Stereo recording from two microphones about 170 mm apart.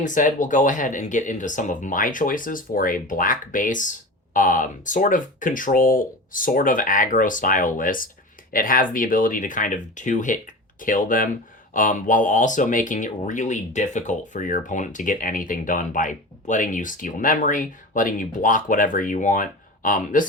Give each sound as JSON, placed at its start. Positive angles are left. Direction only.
{"t": 0.0, "sound": "speech", "side_deg": 50}